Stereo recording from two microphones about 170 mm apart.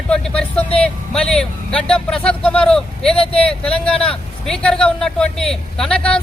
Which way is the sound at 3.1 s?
35° left (ahead or behind).